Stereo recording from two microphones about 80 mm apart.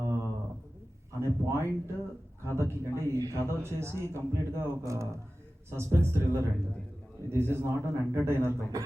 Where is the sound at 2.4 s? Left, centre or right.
Right.